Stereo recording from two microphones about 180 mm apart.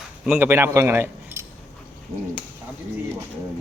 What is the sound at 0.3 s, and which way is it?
A man's voice, 15° right (ahead or behind).